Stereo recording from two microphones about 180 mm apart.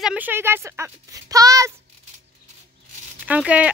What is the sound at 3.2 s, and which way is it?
Speech, 5° right (ahead or behind).